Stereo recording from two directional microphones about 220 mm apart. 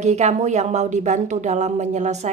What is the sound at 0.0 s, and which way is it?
A woman's voice, 30° right (ahead or behind).